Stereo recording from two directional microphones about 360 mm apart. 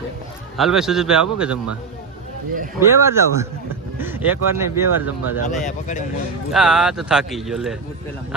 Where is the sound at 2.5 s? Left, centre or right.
Right.